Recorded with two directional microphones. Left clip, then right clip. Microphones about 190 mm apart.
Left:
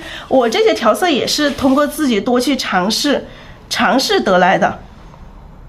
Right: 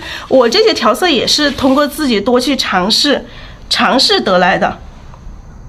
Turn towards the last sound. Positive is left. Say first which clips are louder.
# right 1 dB
turn(degrees=-5)  # may be behind; listen again after turning